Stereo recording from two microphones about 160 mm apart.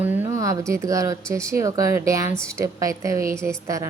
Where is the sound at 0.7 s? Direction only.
20° right (ahead or behind).